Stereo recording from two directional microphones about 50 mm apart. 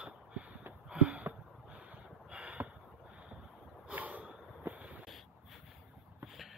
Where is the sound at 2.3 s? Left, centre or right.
Right.